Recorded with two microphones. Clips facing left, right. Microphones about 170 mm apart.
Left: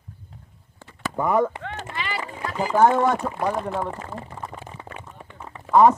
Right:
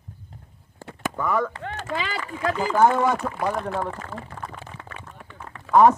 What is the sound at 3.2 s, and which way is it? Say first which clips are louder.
Speech: left 1 dB; 15° left (ahead or behind).